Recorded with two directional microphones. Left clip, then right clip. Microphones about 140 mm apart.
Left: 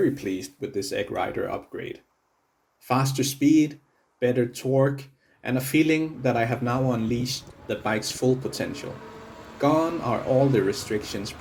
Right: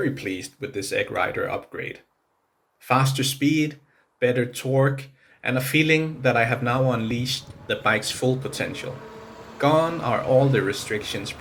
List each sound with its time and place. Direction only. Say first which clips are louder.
0.1 s speech: even; 45° left (ahead or behind)
2.8 s speech: right 3 dB; 40° left (ahead or behind)
9.0 s a sound: right 2 dB; 40° right (ahead or behind)
9.6 s speech: right 2 dB; 40° left (ahead or behind)
10.2 s speech: right 2 dB; 10° left (ahead or behind)
10.9 s speech: right 2 dB; 40° left (ahead or behind)